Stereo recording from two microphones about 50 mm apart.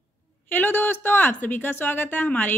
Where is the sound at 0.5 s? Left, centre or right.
Left.